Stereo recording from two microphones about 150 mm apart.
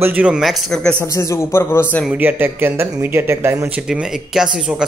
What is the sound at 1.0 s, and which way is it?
A man's voice, 20° left (ahead or behind).